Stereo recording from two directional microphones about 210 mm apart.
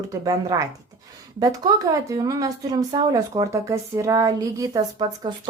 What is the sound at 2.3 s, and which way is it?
Speech, 15° right (ahead or behind).